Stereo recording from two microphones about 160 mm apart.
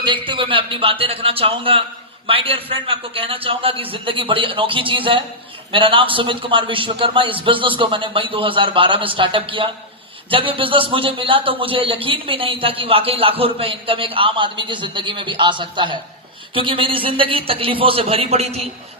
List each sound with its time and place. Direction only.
0.0 s a man's voice: 30° right (ahead or behind)